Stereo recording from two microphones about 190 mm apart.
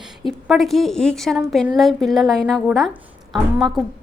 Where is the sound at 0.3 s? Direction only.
Centre (ahead or behind).